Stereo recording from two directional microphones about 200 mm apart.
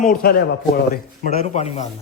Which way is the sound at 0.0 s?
45° left (ahead or behind).